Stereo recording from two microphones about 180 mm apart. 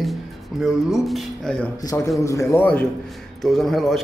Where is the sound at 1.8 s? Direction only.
20° left (ahead or behind).